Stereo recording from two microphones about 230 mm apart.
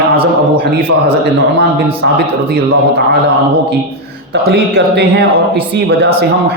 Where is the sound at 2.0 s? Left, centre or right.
Right.